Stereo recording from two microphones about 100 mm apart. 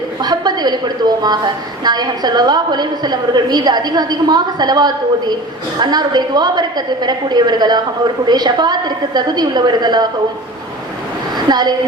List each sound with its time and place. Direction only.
0.2 s a woman's voice: 45° right (ahead or behind)
11.3 s a woman's voice: 45° right (ahead or behind)